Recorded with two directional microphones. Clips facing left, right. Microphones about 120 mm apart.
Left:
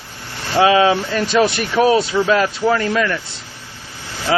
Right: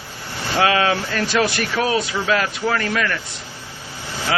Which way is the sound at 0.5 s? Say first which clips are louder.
Left 5 dB; 20° left (ahead or behind).